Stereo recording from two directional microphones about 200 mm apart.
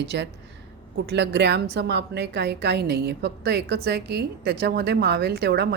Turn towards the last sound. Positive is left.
turn(degrees=-55)  # may be behind; listen again after turning